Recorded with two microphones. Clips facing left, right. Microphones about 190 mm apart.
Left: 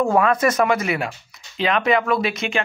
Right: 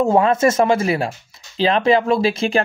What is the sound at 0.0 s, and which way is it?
Speech, 25° right (ahead or behind).